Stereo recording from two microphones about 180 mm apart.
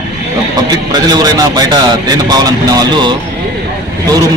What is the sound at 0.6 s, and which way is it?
A man's voice, 20° right (ahead or behind).